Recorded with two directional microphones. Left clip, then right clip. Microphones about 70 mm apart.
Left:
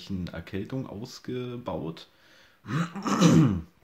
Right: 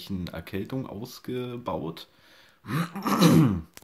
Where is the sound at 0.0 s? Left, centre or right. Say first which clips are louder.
Right 1 dB; right.